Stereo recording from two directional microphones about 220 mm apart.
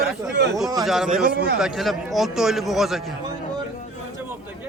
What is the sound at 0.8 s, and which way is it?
Speech, centre (ahead or behind).